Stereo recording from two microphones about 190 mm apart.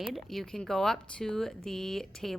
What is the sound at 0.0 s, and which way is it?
Speech, centre (ahead or behind).